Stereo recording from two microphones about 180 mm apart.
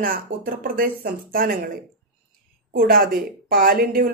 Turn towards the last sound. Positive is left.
turn(degrees=-55)  # may be behind; listen again after turning